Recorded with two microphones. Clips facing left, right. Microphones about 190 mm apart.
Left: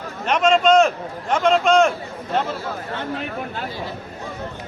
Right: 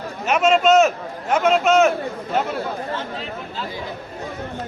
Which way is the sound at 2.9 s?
55° left (ahead or behind).